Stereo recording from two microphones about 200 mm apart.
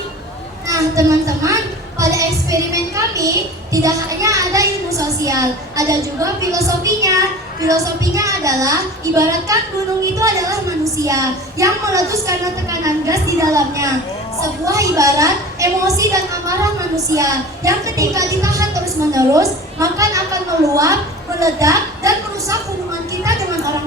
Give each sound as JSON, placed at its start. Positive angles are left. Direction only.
{"t": 0.7, "sound": "a woman's voice", "side_deg": -15}
{"t": 17.1, "sound": "a woman's voice", "side_deg": -15}